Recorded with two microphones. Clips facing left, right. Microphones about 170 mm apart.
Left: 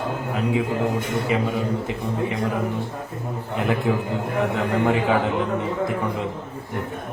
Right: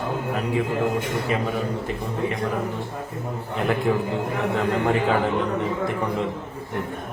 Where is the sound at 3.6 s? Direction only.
15° left (ahead or behind).